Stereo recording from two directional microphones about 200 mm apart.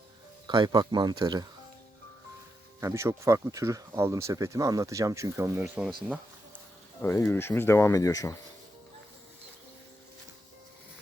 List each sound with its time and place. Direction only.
0.4 s speech: 20° right (ahead or behind)
2.8 s speech: 15° right (ahead or behind)
7.0 s speech: 15° left (ahead or behind)